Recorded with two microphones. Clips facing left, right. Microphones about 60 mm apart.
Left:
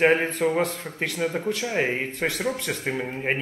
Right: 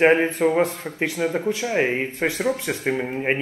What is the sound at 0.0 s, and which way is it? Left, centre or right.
Speech, centre.